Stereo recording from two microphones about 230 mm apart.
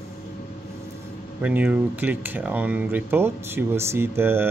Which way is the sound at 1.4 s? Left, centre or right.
Centre.